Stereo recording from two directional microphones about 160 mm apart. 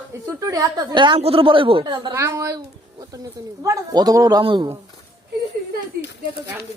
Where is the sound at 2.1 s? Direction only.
20° right (ahead or behind).